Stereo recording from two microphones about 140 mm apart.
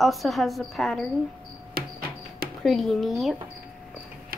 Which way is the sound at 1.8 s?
90° right.